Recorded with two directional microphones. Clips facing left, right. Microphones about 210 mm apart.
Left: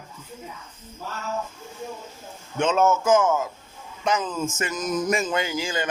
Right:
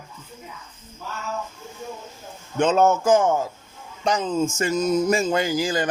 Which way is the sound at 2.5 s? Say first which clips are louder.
Right 2 dB; 35° right (ahead or behind).